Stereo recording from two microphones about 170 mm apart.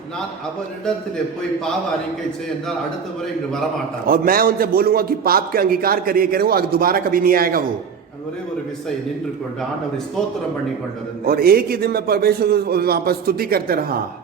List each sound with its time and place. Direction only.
4.0 s a man's voice: 55° right (ahead or behind)
11.3 s a man's voice: 60° right (ahead or behind)